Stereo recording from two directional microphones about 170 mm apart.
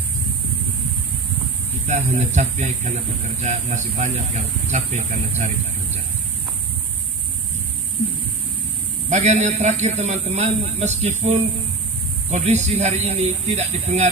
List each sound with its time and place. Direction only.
1.9 s speech: 40° right (ahead or behind)
9.1 s speech: 45° right (ahead or behind)